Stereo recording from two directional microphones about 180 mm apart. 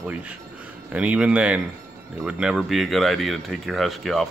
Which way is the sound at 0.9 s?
5° right (ahead or behind).